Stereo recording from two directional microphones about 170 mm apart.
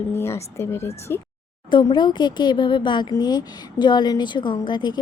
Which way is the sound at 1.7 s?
25° left (ahead or behind).